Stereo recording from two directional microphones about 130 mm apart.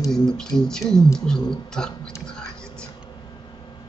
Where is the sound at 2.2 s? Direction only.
5° left (ahead or behind).